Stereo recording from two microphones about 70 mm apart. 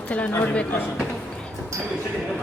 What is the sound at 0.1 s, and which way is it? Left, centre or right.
Speech, left.